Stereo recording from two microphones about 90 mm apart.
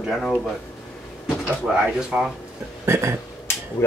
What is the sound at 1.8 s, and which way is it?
Speech, 5° right (ahead or behind).